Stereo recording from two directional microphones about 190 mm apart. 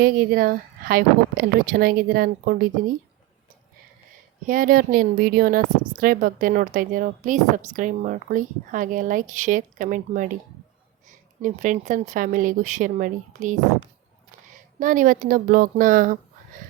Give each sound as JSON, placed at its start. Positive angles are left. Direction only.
{"t": 0.0, "sound": "a woman's voice", "side_deg": -50}
{"t": 4.4, "sound": "a woman's voice", "side_deg": -45}
{"t": 11.4, "sound": "a woman's voice", "side_deg": -40}